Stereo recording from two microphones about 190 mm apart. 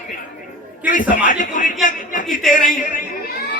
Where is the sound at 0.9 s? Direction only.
45° left (ahead or behind).